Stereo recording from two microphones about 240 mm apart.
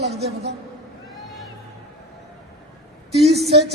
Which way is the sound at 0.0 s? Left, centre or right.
Right.